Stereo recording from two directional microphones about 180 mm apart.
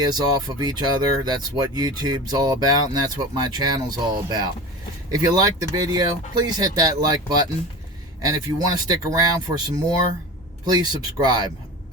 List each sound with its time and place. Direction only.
0.0 s speech: 20° right (ahead or behind)